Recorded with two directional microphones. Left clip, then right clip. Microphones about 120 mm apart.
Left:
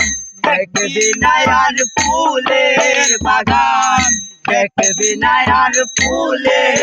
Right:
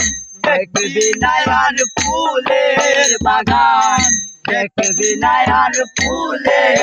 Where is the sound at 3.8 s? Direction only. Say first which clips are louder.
Even; 35° left (ahead or behind).